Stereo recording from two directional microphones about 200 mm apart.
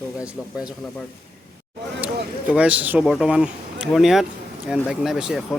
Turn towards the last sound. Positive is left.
turn(degrees=0)  # may be behind; listen again after turning